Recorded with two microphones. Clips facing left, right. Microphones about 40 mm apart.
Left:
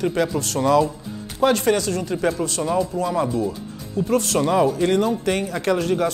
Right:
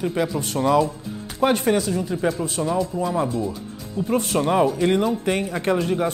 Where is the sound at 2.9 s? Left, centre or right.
Centre.